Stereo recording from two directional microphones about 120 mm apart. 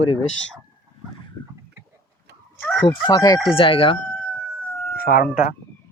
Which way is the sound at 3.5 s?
50° left (ahead or behind).